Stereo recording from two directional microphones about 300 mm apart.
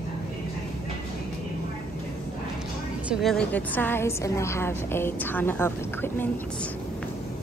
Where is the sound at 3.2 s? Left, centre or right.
Centre.